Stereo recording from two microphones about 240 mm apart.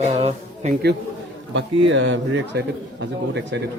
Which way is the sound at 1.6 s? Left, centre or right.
Right.